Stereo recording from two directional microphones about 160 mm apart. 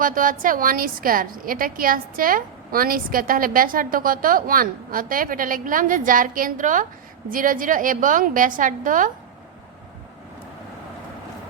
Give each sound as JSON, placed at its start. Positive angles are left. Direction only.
{"t": 0.0, "sound": "a woman's voice", "side_deg": -55}